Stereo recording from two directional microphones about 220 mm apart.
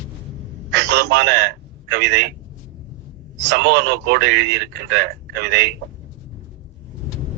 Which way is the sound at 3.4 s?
50° right (ahead or behind).